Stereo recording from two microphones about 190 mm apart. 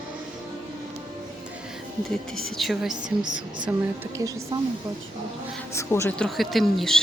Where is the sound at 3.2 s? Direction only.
25° right (ahead or behind).